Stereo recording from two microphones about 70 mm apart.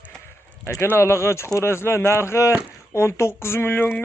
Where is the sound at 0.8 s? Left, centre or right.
Left.